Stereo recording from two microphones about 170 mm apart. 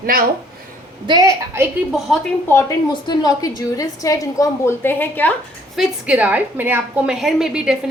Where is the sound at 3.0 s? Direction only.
25° left (ahead or behind).